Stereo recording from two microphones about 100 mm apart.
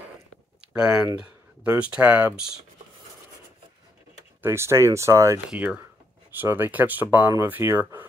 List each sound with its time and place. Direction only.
0.6 s a sound: 10° right (ahead or behind)
1.8 s speech: 15° right (ahead or behind)
4.4 s speech: 25° right (ahead or behind)
5.5 s speech: 10° right (ahead or behind)